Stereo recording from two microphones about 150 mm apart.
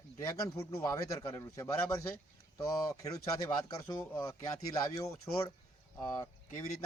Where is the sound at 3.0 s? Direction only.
25° left (ahead or behind).